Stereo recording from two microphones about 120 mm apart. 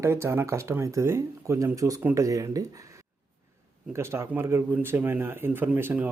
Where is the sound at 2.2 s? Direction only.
25° right (ahead or behind).